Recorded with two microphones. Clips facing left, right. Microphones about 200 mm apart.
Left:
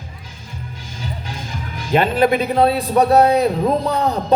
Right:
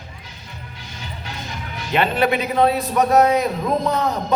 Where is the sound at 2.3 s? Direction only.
35° left (ahead or behind).